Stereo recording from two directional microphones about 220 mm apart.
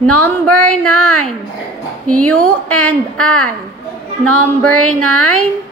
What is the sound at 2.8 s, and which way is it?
Speech, 5° left (ahead or behind).